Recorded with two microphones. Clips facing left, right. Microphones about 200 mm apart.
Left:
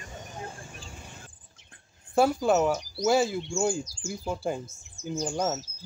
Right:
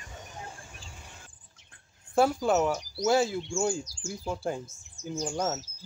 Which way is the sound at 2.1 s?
5° left (ahead or behind).